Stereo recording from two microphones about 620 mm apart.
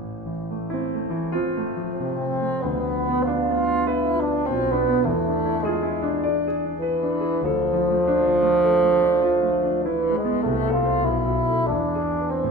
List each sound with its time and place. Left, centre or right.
8.2 s music: centre
11.0 s music: centre